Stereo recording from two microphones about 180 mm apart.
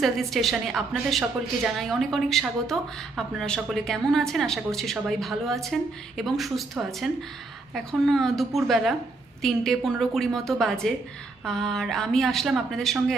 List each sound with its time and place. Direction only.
0.0 s a woman's voice: centre (ahead or behind)